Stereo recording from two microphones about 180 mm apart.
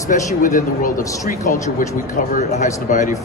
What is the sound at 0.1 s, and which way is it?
A man's voice, 50° left (ahead or behind).